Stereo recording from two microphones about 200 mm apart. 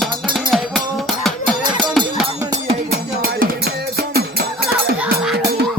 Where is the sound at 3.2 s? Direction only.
50° right (ahead or behind).